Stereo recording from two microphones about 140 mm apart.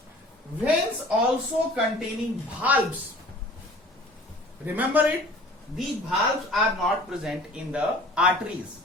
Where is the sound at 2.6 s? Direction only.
10° right (ahead or behind).